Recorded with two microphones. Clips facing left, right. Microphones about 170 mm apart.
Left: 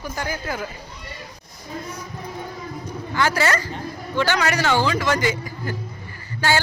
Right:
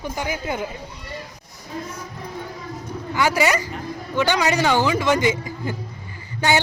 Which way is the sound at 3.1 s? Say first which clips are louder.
Right 2 dB; 15° right (ahead or behind).